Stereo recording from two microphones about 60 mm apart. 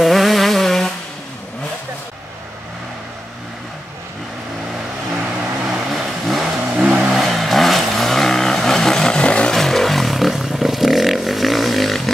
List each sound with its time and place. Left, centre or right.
0.0 s vehicle: centre
5.7 s vehicle: centre
6.4 s vehicle: centre
7.1 s vehicle: centre
9.5 s a sound: centre